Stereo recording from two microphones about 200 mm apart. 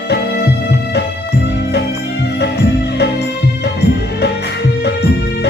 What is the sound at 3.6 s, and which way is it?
Music, 55° left (ahead or behind).